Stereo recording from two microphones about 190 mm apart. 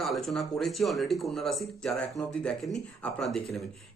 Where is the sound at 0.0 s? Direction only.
Centre (ahead or behind).